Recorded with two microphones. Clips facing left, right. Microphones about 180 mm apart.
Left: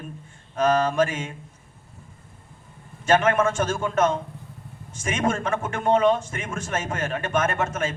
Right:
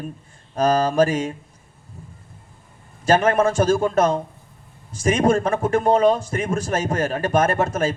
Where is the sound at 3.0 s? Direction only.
35° right (ahead or behind).